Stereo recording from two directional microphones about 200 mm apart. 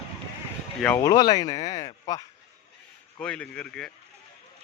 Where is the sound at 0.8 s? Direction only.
10° left (ahead or behind).